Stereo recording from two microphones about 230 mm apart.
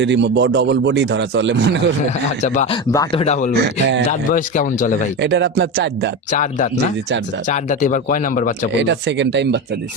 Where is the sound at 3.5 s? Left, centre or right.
Right.